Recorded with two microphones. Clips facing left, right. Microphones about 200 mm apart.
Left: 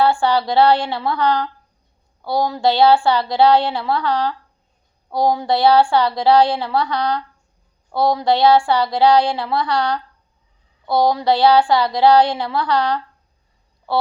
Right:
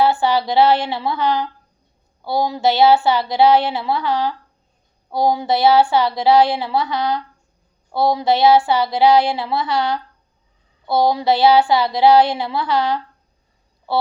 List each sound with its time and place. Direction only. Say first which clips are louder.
0.0 s a woman's voice: even; 20° right (ahead or behind)
2.6 s a woman's voice: even; 20° right (ahead or behind)
10.8 s a child's voice: even; 5° right (ahead or behind)
11.3 s a woman's voice: even; 20° right (ahead or behind)